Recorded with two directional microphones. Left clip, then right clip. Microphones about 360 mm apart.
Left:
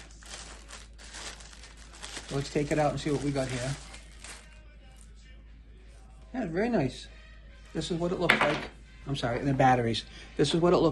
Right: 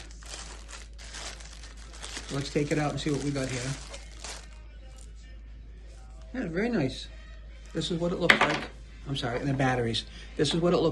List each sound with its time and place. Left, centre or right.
0.2 s a sound: centre
2.5 s speech: centre
3.4 s speech: centre
6.3 s speech: centre